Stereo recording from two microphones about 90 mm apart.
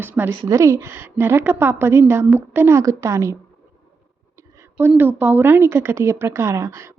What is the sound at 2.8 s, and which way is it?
Speech, 35° right (ahead or behind).